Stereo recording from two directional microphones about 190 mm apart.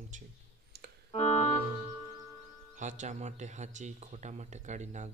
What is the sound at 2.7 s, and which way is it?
Speech, 40° right (ahead or behind).